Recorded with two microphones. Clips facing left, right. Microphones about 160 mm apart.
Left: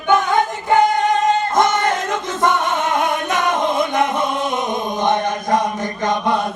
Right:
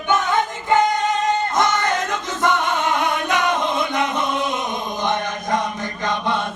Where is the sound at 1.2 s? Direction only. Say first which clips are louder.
Left 3 dB; 20° left (ahead or behind).